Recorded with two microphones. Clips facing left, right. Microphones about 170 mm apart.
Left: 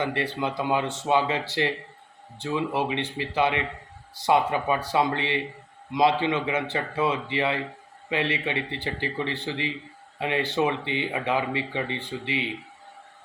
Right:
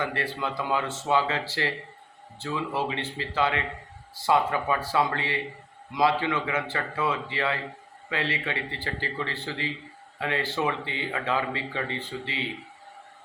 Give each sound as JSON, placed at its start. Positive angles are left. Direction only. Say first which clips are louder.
{"t": 0.0, "sound": "speech", "louder": "left 3 dB", "side_deg": 20}